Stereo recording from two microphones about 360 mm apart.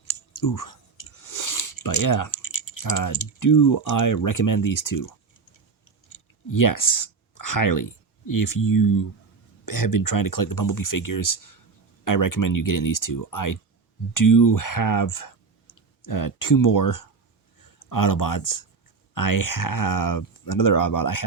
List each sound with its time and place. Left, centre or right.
0.3 s chewing: left
2.4 s speech: left
6.1 s a sound: left
8.3 s speech: left